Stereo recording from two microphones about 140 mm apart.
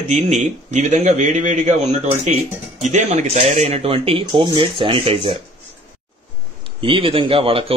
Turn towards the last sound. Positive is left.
turn(degrees=-40)  # may be behind; listen again after turning